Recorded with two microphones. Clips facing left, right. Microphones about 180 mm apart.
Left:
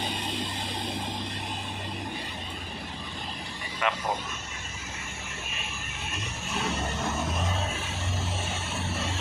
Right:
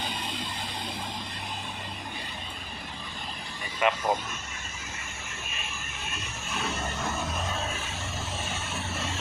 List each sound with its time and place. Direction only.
3.8 s a man's voice: 20° right (ahead or behind)